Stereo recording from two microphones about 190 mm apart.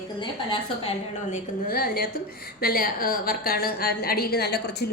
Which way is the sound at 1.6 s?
50° left (ahead or behind).